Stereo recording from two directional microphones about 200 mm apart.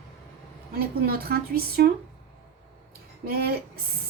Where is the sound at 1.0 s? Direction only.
50° right (ahead or behind).